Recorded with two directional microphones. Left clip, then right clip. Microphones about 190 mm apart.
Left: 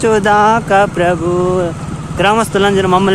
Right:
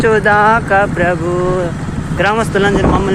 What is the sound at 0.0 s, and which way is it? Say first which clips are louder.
Speech: even; 35° left (ahead or behind).